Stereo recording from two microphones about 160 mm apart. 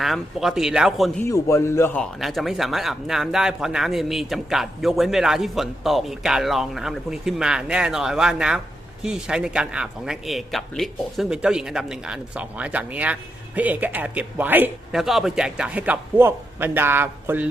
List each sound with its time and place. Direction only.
0.0 s speech: centre (ahead or behind)
1.2 s a man's voice: 20° left (ahead or behind)
2.2 s a man's voice: centre (ahead or behind)